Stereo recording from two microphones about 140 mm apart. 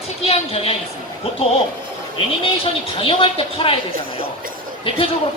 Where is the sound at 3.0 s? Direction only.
40° left (ahead or behind).